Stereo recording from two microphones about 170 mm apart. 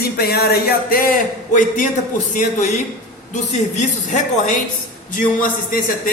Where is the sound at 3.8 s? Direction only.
45° left (ahead or behind).